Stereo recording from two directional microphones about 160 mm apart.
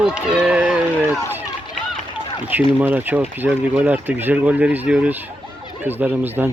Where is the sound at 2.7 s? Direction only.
10° right (ahead or behind).